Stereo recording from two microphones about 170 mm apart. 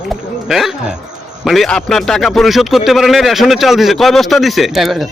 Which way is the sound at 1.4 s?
Centre (ahead or behind).